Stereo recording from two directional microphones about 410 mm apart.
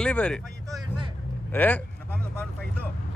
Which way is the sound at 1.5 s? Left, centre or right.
Centre.